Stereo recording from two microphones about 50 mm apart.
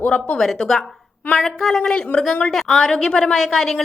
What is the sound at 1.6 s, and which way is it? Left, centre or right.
A woman's voice, centre.